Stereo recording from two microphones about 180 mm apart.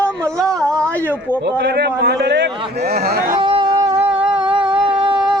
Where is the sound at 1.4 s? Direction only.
70° right (ahead or behind).